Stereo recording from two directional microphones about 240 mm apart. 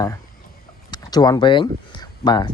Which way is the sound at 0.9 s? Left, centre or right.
Centre.